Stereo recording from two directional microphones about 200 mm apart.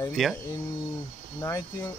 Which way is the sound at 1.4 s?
15° left (ahead or behind).